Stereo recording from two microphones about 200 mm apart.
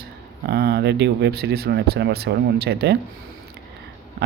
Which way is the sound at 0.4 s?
55° right (ahead or behind).